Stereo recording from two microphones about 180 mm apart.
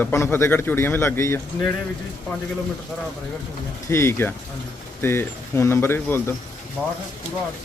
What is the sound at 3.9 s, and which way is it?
A man's voice, 15° left (ahead or behind).